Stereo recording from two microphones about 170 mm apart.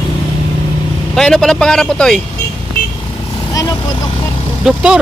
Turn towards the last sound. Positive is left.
turn(degrees=-5)  # may be behind; listen again after turning